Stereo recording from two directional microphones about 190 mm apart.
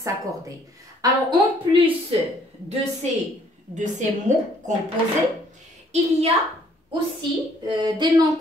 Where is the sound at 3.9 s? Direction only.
40° right (ahead or behind).